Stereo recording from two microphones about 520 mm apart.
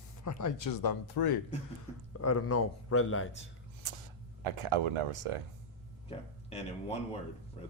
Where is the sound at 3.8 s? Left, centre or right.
Right.